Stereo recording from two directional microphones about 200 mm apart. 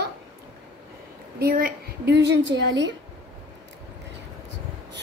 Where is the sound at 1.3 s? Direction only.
50° right (ahead or behind).